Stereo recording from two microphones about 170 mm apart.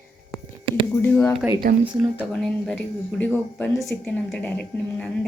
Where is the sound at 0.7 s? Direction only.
30° right (ahead or behind).